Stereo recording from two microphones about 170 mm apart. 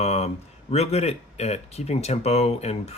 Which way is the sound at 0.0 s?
40° left (ahead or behind).